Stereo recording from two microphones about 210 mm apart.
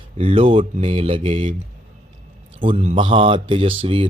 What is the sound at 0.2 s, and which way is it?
Speech, 25° right (ahead or behind).